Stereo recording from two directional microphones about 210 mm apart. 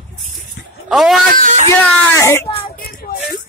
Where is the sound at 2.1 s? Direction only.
10° left (ahead or behind).